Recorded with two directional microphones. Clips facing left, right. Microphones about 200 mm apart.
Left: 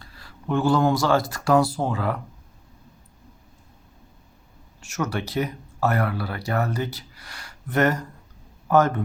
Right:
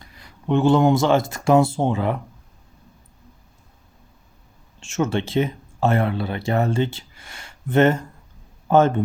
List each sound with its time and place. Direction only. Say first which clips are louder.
0.0 s speech: right 3 dB; 20° right (ahead or behind)
4.8 s a man's voice: right 5 dB; 25° right (ahead or behind)